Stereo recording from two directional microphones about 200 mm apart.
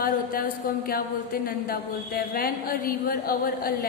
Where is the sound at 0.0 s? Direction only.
45° left (ahead or behind).